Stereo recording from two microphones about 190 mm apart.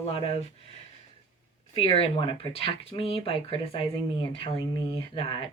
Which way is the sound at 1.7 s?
30° left (ahead or behind).